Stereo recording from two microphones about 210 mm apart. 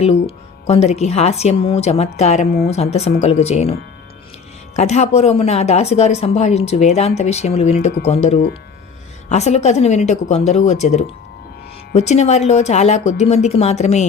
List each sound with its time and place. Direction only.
0.0 s speech: 30° left (ahead or behind)
4.8 s speech: 30° left (ahead or behind)